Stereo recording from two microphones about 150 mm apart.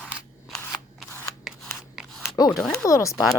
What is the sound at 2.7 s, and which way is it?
Speech, 20° left (ahead or behind).